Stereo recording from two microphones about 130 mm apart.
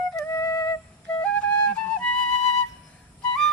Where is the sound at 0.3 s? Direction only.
25° left (ahead or behind).